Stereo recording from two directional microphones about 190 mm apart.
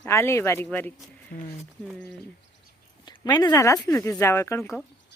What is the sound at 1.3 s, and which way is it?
Speech, 45° left (ahead or behind).